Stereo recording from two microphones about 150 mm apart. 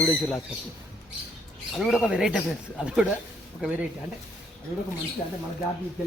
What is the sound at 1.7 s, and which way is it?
Speech, 5° right (ahead or behind).